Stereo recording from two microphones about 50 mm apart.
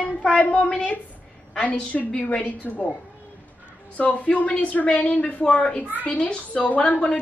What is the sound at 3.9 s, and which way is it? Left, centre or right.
A woman's voice, left.